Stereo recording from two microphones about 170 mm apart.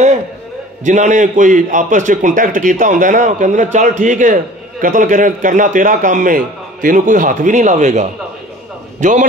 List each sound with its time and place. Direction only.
0.8 s a man's voice: 45° right (ahead or behind)